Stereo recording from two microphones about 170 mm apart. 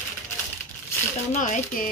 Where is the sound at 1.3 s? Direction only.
45° left (ahead or behind).